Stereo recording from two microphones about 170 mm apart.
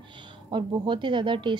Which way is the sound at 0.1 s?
30° right (ahead or behind).